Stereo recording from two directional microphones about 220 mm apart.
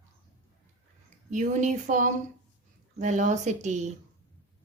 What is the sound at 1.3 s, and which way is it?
A woman's voice, 35° right (ahead or behind).